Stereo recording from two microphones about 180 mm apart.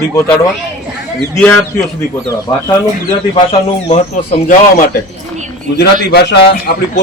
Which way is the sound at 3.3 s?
30° left (ahead or behind).